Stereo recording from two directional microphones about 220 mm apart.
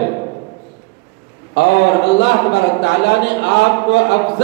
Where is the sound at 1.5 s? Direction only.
50° left (ahead or behind).